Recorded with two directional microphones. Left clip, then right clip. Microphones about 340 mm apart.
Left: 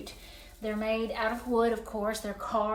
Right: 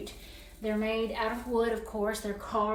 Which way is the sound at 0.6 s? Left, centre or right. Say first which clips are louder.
Even; centre.